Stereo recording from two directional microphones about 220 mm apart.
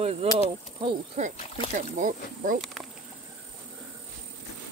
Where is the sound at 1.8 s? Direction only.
35° right (ahead or behind).